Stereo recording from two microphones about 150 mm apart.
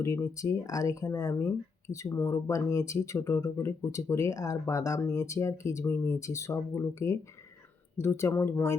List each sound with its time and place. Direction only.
0.0 s speech: 20° left (ahead or behind)
7.9 s speech: 20° left (ahead or behind)